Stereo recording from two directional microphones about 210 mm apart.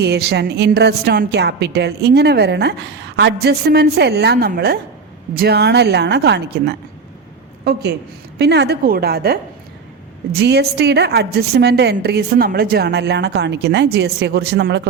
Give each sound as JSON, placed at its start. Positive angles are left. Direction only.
{"t": 0.0, "sound": "a woman's voice", "side_deg": -50}
{"t": 10.4, "sound": "a woman's voice", "side_deg": -50}